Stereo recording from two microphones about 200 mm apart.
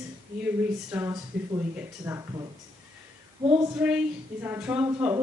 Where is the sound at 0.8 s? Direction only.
10° right (ahead or behind).